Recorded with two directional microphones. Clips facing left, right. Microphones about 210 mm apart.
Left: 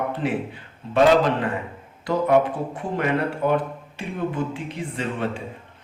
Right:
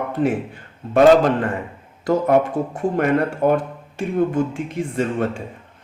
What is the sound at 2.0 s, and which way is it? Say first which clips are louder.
A man's voice: right 2 dB; 45° right (ahead or behind).